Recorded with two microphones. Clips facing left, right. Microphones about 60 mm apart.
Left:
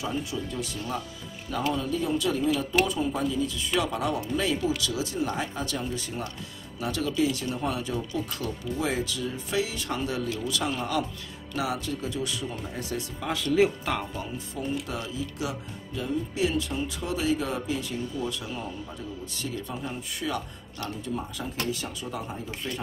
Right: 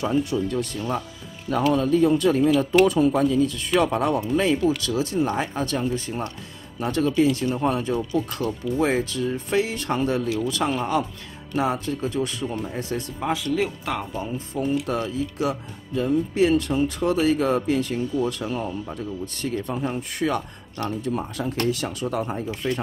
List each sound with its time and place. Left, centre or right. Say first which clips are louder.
0.0 s speech: right 8 dB; right
13.6 s speech: left 2 dB; centre
14.5 s speech: right 8 dB; right